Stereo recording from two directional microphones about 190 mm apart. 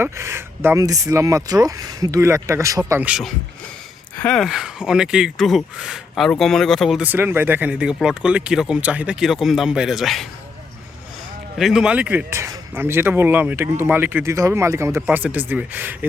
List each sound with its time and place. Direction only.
0.0 s speech: 15° right (ahead or behind)
11.5 s speech: centre (ahead or behind)